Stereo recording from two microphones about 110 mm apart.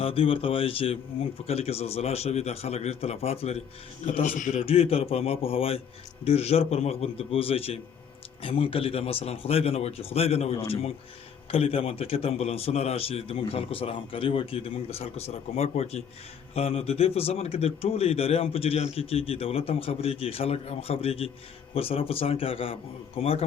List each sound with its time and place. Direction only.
0.0 s a man's voice: 55° left (ahead or behind); by 16.0 s 75° left (ahead or behind)
16.6 s speech: 65° left (ahead or behind)